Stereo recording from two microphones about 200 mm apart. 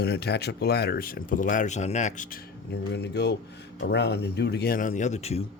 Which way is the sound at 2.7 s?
55° left (ahead or behind).